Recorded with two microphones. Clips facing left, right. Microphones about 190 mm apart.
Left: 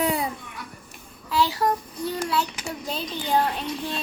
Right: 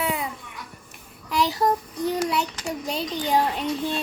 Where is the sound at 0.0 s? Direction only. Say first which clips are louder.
Left 3 dB; 40° left (ahead or behind).